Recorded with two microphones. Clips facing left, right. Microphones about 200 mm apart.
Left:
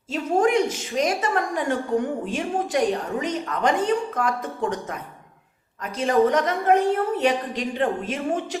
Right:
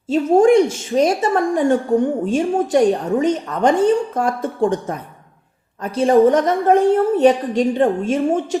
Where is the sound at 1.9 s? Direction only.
50° right (ahead or behind).